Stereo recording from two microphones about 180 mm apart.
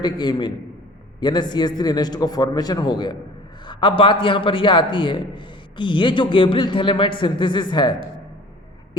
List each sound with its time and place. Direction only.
0.0 s a man's voice: 25° left (ahead or behind)